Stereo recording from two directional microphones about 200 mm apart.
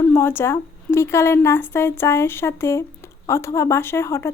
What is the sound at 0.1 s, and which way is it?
Speech, 10° left (ahead or behind).